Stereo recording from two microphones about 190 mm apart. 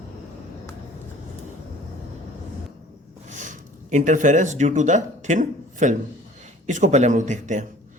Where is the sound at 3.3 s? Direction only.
40° right (ahead or behind).